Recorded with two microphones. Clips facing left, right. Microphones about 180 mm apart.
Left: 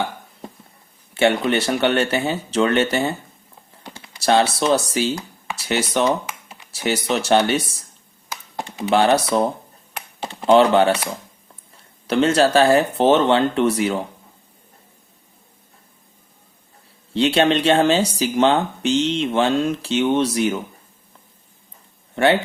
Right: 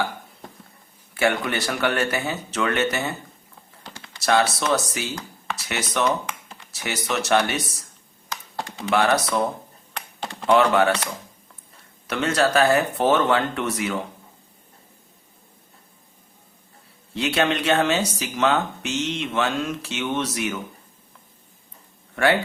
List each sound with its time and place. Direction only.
1.1 s speech: 25° left (ahead or behind)
3.8 s typing: 15° left (ahead or behind)
4.2 s speech: 30° left (ahead or behind)
6.2 s computer keyboard: 5° left (ahead or behind)
6.7 s speech: 30° left (ahead or behind)
8.5 s typing: 15° left (ahead or behind)
8.9 s speech: 30° left (ahead or behind)
12.0 s speech: 30° left (ahead or behind)
17.2 s speech: 30° left (ahead or behind)
22.1 s speech: 25° left (ahead or behind)